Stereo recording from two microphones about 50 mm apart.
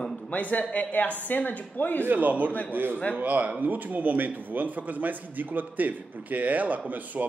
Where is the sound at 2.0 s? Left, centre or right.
Right.